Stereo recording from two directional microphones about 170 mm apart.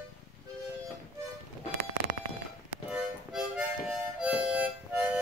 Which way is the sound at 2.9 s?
5° right (ahead or behind).